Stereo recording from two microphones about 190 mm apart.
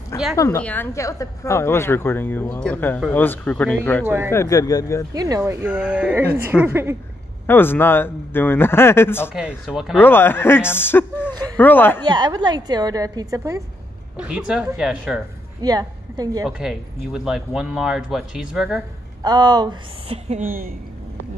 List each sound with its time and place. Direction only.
0.4 s a woman's voice: 10° left (ahead or behind)
4.0 s speech: 15° right (ahead or behind)
4.3 s a woman's voice: 15° left (ahead or behind)
5.1 s speech: 20° right (ahead or behind)
5.4 s speech: 10° right (ahead or behind)
7.4 s a woman's voice: 10° left (ahead or behind)
9.3 s speech: 5° right (ahead or behind)
9.9 s a woman's voice: 10° left (ahead or behind)
12.0 s speech: 25° right (ahead or behind)
14.1 s speech: 5° right (ahead or behind)
15.6 s a woman's voice: 20° right (ahead or behind)
16.4 s speech: 5° right (ahead or behind)
19.2 s speech: 20° right (ahead or behind)
20.2 s a woman's voice: 45° right (ahead or behind)